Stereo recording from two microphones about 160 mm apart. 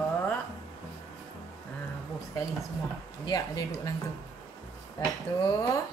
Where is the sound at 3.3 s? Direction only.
25° left (ahead or behind).